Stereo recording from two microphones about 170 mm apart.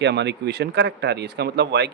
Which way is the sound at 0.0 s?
85° right.